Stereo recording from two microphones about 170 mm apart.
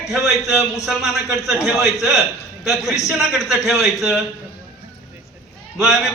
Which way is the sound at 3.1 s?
Centre (ahead or behind).